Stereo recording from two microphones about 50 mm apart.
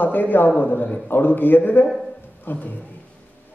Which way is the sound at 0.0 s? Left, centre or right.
Left.